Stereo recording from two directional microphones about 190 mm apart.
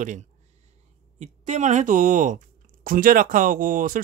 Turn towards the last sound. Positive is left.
turn(degrees=-45)  # may be behind; listen again after turning